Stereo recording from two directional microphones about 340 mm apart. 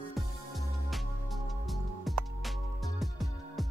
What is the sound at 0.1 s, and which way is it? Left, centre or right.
Music, centre.